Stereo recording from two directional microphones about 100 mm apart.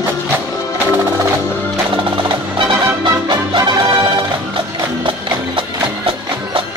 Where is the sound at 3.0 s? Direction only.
45° right (ahead or behind).